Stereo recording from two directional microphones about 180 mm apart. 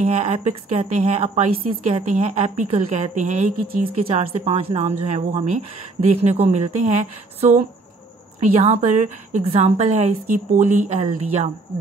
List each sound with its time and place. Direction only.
0.0 s a woman's voice: 40° right (ahead or behind)